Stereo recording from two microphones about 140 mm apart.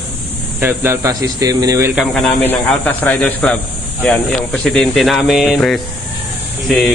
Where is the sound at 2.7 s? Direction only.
10° left (ahead or behind).